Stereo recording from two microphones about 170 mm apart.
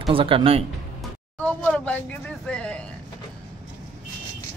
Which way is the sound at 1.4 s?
10° left (ahead or behind).